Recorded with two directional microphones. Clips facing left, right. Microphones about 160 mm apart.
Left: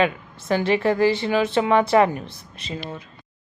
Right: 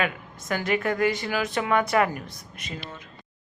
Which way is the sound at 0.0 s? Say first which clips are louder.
Left 7 dB; 25° left (ahead or behind).